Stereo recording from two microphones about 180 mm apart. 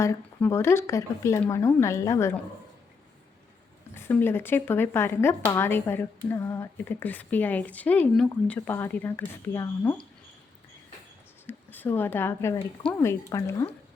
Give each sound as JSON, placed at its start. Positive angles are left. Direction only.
{"t": 0.0, "sound": "speech", "side_deg": 15}
{"t": 3.9, "sound": "speech", "side_deg": 10}
{"t": 11.4, "sound": "speech", "side_deg": 10}